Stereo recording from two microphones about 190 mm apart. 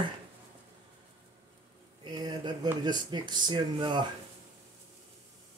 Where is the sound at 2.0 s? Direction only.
20° right (ahead or behind).